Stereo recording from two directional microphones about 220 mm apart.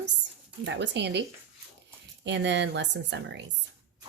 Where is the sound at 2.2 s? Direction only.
55° right (ahead or behind).